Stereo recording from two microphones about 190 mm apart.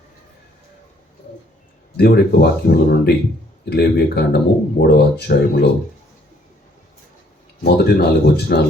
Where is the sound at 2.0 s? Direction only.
55° left (ahead or behind).